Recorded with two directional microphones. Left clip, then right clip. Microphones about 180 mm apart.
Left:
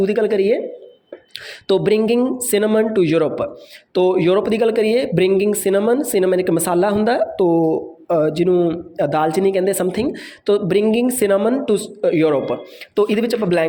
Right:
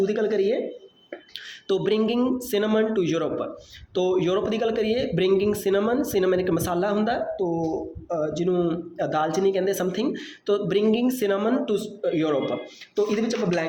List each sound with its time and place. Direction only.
0.0 s speech: 40° left (ahead or behind)
1.6 s speech: 35° left (ahead or behind)
2.0 s a man's voice: 25° left (ahead or behind); by 8.5 s 45° left (ahead or behind)
8.5 s a man's voice: 30° left (ahead or behind); by 13.7 s 50° left (ahead or behind)